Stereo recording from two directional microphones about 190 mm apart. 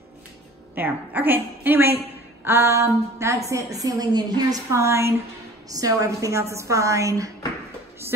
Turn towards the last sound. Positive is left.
turn(degrees=-15)  # may be behind; listen again after turning